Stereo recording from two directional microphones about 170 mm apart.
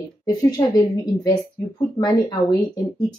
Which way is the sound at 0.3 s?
25° left (ahead or behind).